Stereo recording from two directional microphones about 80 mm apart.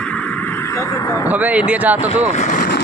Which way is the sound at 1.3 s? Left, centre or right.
Centre.